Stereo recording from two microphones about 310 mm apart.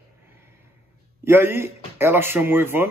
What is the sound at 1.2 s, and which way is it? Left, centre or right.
Speech, centre.